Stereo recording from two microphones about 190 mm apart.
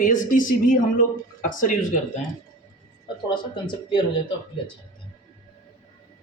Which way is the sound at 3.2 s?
25° left (ahead or behind).